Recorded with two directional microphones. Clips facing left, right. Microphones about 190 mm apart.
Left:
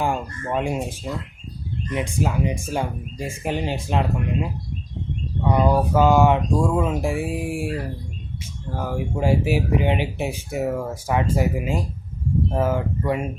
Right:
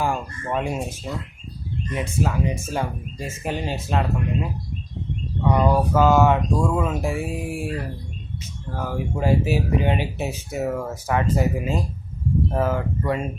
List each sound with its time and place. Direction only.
0.0 s speech: 15° left (ahead or behind)
8.7 s speech: 15° left (ahead or behind)